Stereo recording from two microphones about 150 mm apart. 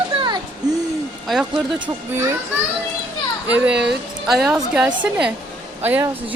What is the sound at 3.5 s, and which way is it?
A woman's voice, 5° right (ahead or behind).